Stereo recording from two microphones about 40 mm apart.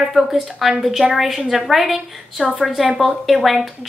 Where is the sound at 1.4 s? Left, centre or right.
Centre.